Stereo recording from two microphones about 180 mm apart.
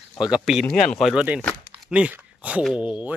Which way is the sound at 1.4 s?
5° left (ahead or behind).